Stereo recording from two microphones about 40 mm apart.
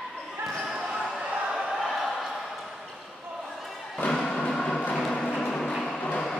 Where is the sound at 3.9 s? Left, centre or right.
Left.